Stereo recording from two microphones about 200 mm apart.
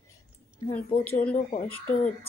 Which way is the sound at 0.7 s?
10° left (ahead or behind).